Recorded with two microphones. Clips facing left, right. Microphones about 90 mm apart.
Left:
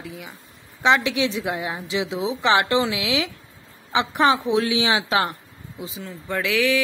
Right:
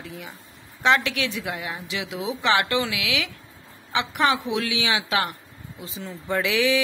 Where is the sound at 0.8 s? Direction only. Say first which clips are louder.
Left 2 dB; 20° left (ahead or behind).